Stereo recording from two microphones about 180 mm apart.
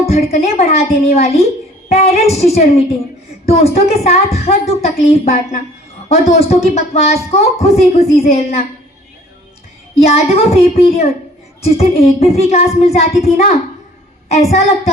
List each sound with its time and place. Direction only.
0.1 s a woman's voice: 35° left (ahead or behind)
10.1 s a woman's voice: 35° left (ahead or behind)